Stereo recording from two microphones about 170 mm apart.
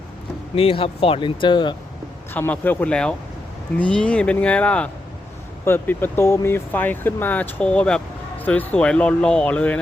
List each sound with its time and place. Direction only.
0.5 s speech: 35° left (ahead or behind)
2.3 s speech: 10° left (ahead or behind)